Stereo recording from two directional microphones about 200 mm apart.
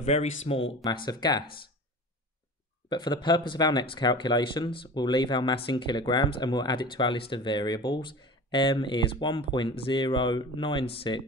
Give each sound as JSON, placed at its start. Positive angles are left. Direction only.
{"t": 0.0, "sound": "speech", "side_deg": 35}
{"t": 2.9, "sound": "speech", "side_deg": 20}